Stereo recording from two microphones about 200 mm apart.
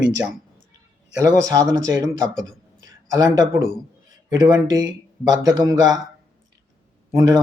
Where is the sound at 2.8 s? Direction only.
20° right (ahead or behind).